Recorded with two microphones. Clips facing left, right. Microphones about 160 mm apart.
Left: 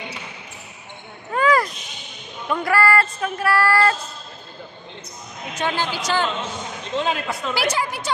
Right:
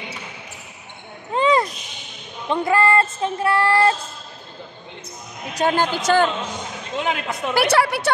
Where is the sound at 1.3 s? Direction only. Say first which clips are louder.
Right 1 dB; 25° right (ahead or behind).